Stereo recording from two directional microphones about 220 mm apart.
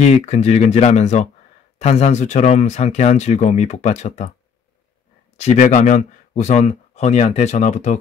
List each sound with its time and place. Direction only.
0.0 s speech: 30° left (ahead or behind)
5.4 s speech: 35° left (ahead or behind)